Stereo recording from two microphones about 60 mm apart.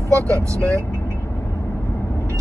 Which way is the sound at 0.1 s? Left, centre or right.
Right.